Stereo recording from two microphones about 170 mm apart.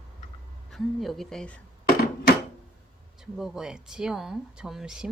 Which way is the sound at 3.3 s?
Centre (ahead or behind).